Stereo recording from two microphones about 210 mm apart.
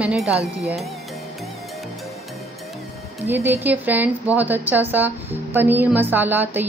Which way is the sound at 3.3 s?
10° right (ahead or behind).